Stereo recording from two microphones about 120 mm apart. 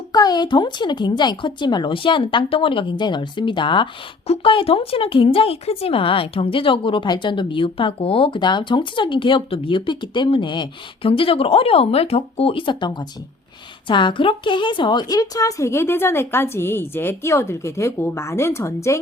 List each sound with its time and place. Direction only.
0.1 s a woman's voice: 35° left (ahead or behind)